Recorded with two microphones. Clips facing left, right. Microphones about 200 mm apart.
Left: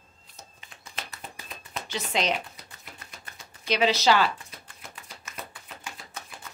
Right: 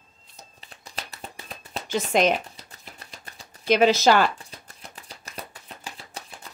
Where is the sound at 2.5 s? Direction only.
35° right (ahead or behind).